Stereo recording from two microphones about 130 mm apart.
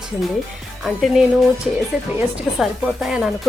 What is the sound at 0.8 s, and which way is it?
Speech, centre (ahead or behind).